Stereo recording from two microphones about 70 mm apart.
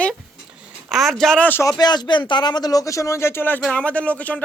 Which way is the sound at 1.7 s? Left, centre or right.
Left.